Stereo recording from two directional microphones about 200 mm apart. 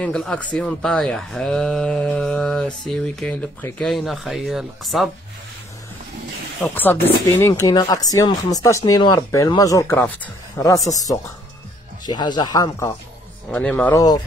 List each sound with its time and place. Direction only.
0.0 s speech: 5° left (ahead or behind)
6.6 s speech: 10° left (ahead or behind)
13.5 s speech: 5° left (ahead or behind)
13.9 s speech: 20° left (ahead or behind)